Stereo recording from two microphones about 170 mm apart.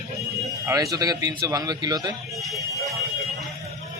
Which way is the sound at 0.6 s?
20° right (ahead or behind).